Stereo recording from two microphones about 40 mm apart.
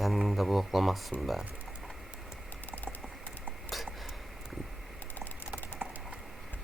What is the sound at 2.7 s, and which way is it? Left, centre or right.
Typing, left.